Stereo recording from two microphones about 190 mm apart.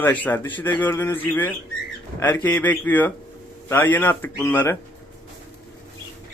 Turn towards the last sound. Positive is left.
turn(degrees=10)  # may be behind; listen again after turning